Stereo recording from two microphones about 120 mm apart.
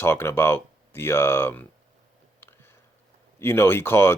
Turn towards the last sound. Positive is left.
turn(degrees=20)  # may be behind; listen again after turning